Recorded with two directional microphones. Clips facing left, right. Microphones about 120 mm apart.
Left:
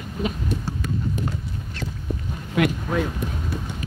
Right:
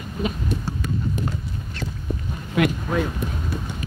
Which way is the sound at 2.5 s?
20° right (ahead or behind).